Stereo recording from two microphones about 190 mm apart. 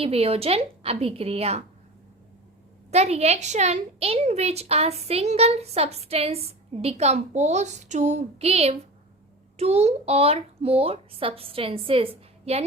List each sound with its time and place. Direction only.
0.0 s a woman's voice: 30° right (ahead or behind)
2.9 s a woman's voice: 35° right (ahead or behind)